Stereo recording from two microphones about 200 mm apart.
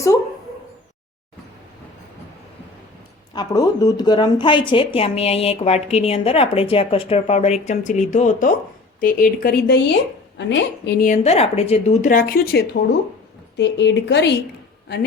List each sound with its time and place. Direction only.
3.3 s a woman's voice: 20° left (ahead or behind); by 10.9 s 60° left (ahead or behind)
11.0 s a woman's voice: 35° left (ahead or behind)
13.6 s a woman's voice: 60° left (ahead or behind)